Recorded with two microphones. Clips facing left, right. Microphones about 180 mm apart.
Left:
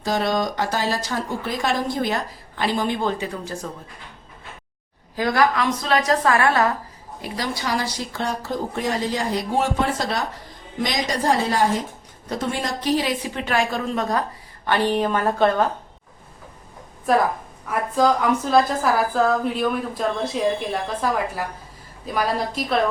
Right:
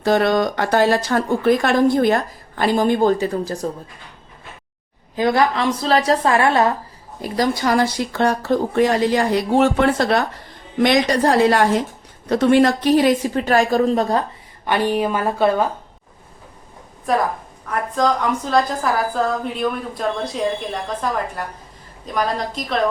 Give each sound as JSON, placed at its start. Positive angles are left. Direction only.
{"t": 0.0, "sound": "speech", "side_deg": -60}
{"t": 5.1, "sound": "a woman's voice", "side_deg": -25}
{"t": 7.2, "sound": "a woman's voice", "side_deg": -45}
{"t": 14.7, "sound": "a woman's voice", "side_deg": -10}
{"t": 17.1, "sound": "a woman's voice", "side_deg": 0}